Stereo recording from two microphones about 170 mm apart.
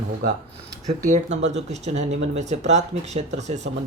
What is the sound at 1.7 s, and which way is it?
Speech, 40° right (ahead or behind).